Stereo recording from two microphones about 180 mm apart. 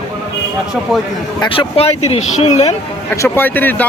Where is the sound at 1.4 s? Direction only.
30° left (ahead or behind).